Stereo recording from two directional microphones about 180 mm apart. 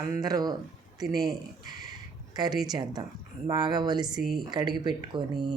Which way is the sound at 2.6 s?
20° right (ahead or behind).